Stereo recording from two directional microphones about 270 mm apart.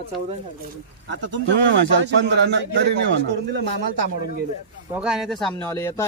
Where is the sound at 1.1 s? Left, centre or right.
Right.